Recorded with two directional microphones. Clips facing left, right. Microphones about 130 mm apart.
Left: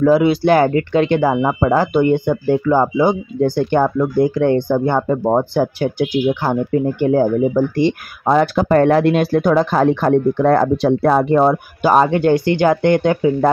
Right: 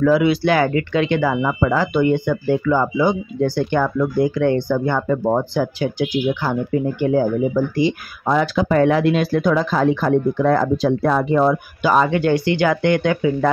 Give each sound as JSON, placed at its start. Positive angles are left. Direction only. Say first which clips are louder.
{"t": 0.0, "sound": "speech", "louder": "left 3 dB", "side_deg": 35}
{"t": 2.6, "sound": "speech", "louder": "left 4 dB", "side_deg": 40}
{"t": 5.1, "sound": "speech", "louder": "left 1 dB", "side_deg": 30}
{"t": 5.5, "sound": "speech", "louder": "left 3 dB", "side_deg": 55}